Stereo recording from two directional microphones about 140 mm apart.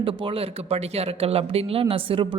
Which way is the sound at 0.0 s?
40° right (ahead or behind).